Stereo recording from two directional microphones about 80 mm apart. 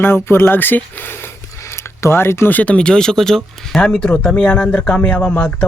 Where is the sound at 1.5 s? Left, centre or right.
Left.